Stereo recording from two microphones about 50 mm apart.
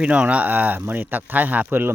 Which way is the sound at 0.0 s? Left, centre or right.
Right.